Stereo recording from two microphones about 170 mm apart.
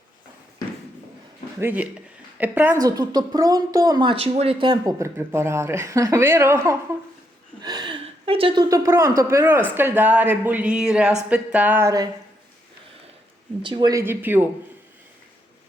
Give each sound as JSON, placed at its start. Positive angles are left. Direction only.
{"t": 1.5, "sound": "speech", "side_deg": -10}
{"t": 2.8, "sound": "a woman's voice", "side_deg": -25}
{"t": 7.6, "sound": "a sound", "side_deg": -25}
{"t": 8.7, "sound": "speech", "side_deg": -20}
{"t": 13.6, "sound": "a woman's voice", "side_deg": -30}
{"t": 14.0, "sound": "speech", "side_deg": -10}